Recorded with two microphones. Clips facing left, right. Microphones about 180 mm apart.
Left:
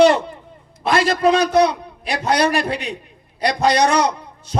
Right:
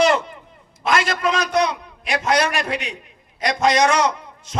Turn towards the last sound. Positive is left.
turn(degrees=35)  # may be behind; listen again after turning